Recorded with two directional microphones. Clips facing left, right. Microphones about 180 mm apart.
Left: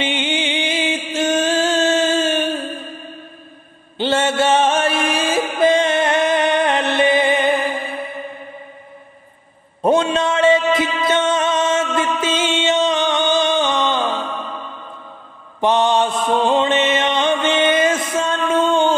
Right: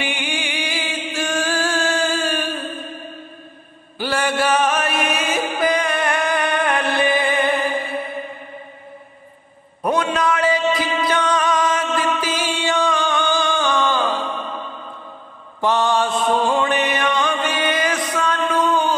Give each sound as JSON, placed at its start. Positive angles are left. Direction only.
{"t": 0.0, "sound": "music", "side_deg": 20}
{"t": 4.0, "sound": "music", "side_deg": 25}
{"t": 9.8, "sound": "a sound", "side_deg": 25}
{"t": 11.1, "sound": "music", "side_deg": 25}
{"t": 15.6, "sound": "mantra", "side_deg": 20}